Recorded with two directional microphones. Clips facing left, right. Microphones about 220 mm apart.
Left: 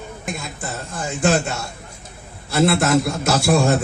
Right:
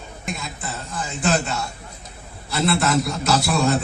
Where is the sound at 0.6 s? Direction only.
45° left (ahead or behind).